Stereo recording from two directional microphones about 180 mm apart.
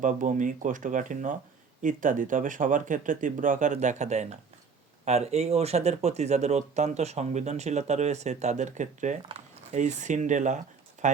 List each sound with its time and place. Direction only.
0.0 s speech: 45° right (ahead or behind)